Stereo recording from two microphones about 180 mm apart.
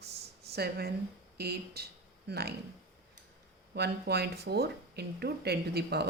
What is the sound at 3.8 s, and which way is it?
A woman's voice, 65° right (ahead or behind).